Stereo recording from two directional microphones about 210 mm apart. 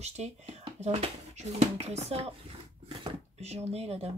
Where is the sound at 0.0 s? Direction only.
30° right (ahead or behind).